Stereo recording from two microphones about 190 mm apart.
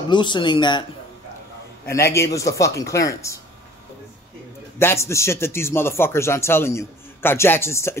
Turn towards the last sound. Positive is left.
turn(degrees=15)  # may be behind; listen again after turning